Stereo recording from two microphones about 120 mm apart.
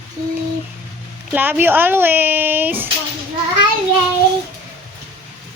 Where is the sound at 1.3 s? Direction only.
15° right (ahead or behind).